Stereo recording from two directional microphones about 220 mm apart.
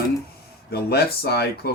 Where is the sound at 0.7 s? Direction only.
45° left (ahead or behind).